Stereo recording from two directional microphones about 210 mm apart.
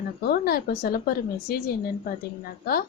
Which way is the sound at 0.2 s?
45° left (ahead or behind).